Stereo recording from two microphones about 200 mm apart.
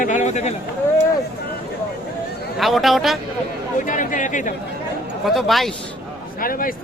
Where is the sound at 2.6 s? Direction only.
Centre (ahead or behind).